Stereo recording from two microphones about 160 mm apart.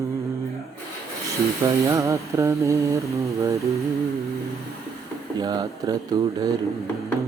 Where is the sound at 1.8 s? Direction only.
20° right (ahead or behind).